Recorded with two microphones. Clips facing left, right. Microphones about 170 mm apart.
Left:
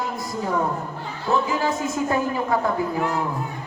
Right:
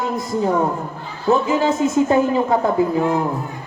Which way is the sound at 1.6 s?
25° right (ahead or behind).